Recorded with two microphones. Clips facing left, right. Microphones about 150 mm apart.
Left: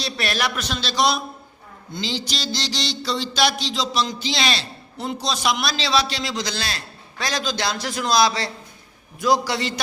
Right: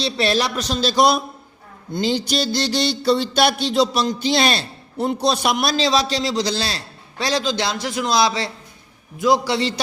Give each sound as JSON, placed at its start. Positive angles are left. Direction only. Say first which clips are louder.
{"t": 0.0, "sound": "a man's voice", "louder": "right 5 dB", "side_deg": -30}
{"t": 1.9, "sound": "music", "louder": "right 7 dB", "side_deg": -55}
{"t": 9.1, "sound": "a man's voice", "louder": "right 3 dB", "side_deg": -25}